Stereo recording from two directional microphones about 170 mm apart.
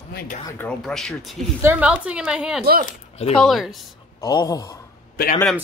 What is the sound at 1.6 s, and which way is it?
A woman's voice, 10° right (ahead or behind).